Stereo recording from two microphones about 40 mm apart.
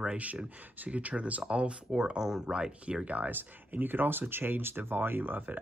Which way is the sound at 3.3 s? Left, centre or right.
Right.